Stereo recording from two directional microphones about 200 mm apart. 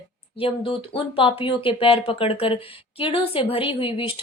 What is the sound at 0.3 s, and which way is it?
Speech, 25° left (ahead or behind).